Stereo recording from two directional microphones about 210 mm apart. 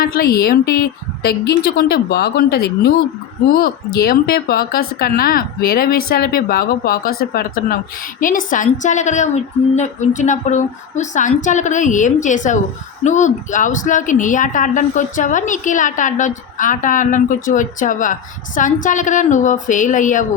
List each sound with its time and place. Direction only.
0.0 s speech: 45° left (ahead or behind)
3.9 s a woman's voice: 45° left (ahead or behind)